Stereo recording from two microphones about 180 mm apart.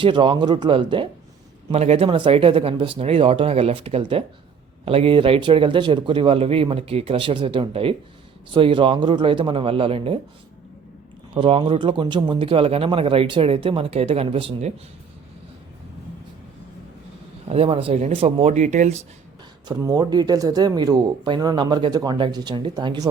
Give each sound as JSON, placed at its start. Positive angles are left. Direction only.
{"t": 0.0, "sound": "speech", "side_deg": -25}
{"t": 11.3, "sound": "speech", "side_deg": -30}
{"t": 17.5, "sound": "speech", "side_deg": -30}
{"t": 19.6, "sound": "speech", "side_deg": -20}